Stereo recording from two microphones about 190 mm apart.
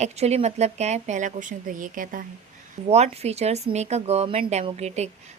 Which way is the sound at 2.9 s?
35° right (ahead or behind).